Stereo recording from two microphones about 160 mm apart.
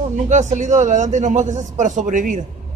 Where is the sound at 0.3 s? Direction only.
50° right (ahead or behind).